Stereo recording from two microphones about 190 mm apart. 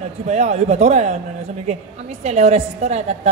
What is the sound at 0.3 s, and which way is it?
Speech, 35° right (ahead or behind).